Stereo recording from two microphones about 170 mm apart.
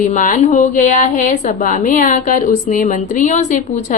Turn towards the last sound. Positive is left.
turn(degrees=45)  # may be behind; listen again after turning